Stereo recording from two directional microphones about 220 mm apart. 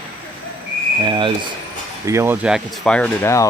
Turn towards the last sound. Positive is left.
turn(degrees=10)  # may be behind; listen again after turning